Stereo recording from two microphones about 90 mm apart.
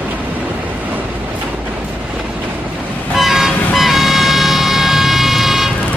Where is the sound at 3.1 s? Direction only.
Centre (ahead or behind).